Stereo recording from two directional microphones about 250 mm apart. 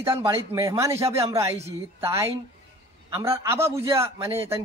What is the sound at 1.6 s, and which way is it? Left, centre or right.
Speech, right.